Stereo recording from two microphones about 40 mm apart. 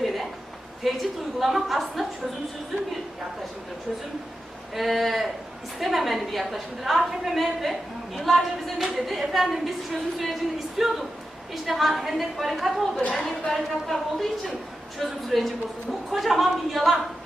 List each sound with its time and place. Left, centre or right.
0.8 s a woman's voice: centre
4.7 s a woman's voice: centre